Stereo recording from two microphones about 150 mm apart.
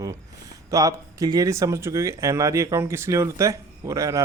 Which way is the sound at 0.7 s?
20° right (ahead or behind).